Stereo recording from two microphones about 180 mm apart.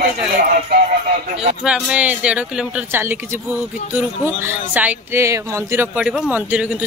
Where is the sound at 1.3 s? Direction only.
5° right (ahead or behind).